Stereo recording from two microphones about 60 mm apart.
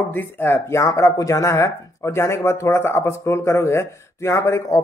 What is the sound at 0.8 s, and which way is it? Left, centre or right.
Speech, left.